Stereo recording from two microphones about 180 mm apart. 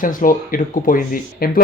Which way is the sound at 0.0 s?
50° left (ahead or behind).